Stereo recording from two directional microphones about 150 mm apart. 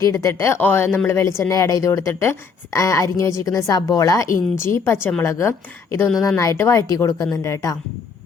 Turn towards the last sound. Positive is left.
turn(degrees=20)  # may be behind; listen again after turning